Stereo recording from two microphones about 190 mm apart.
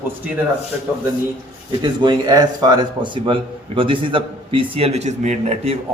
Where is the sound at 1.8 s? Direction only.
20° right (ahead or behind).